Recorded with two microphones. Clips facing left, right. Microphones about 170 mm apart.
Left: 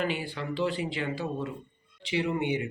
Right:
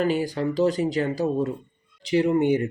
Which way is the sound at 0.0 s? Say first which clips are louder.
Right 8 dB; 40° right (ahead or behind).